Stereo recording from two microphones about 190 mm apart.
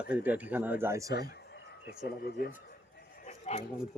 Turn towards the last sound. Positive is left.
turn(degrees=35)  # may be behind; listen again after turning